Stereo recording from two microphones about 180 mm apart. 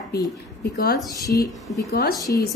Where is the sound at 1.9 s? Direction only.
55° left (ahead or behind).